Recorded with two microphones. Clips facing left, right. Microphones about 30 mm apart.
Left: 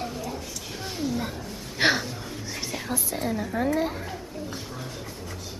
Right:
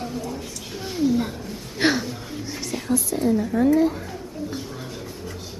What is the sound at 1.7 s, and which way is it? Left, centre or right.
Speech, centre.